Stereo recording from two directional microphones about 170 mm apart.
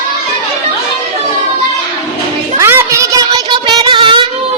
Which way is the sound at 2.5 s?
15° right (ahead or behind).